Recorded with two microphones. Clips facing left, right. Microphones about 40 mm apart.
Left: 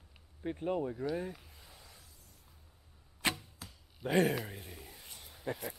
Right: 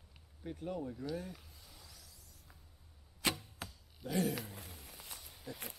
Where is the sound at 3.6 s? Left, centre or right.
Right.